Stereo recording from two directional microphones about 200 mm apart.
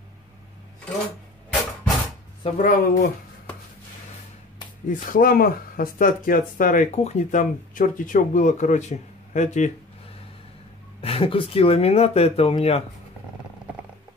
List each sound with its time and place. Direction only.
2.4 s speech: 40° left (ahead or behind)
4.8 s speech: 45° left (ahead or behind)
11.0 s speech: 30° left (ahead or behind)